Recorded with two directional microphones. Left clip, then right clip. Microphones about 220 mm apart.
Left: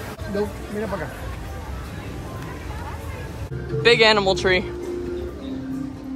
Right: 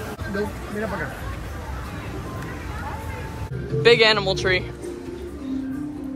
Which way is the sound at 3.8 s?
15° left (ahead or behind).